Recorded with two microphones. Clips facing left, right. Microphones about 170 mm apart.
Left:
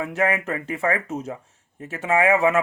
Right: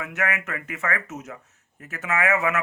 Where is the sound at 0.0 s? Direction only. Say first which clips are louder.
Left 6 dB; 30° left (ahead or behind).